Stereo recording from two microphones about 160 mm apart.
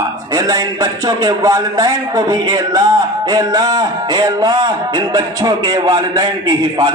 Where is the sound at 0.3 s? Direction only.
20° right (ahead or behind).